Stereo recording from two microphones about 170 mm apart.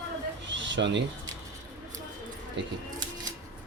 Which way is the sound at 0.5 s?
90° right.